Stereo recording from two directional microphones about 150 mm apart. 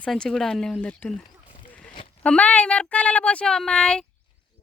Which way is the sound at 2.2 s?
10° left (ahead or behind).